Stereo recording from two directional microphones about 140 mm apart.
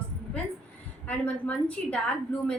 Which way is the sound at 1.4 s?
10° left (ahead or behind).